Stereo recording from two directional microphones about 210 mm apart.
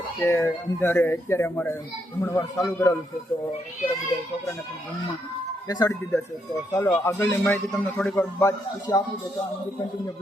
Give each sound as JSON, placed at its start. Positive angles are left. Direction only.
{"t": 0.2, "sound": "speech", "side_deg": 15}
{"t": 5.6, "sound": "speech", "side_deg": 15}